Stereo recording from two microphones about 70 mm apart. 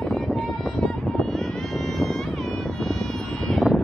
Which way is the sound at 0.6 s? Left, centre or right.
Centre.